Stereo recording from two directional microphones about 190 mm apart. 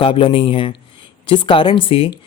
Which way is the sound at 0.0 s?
25° left (ahead or behind).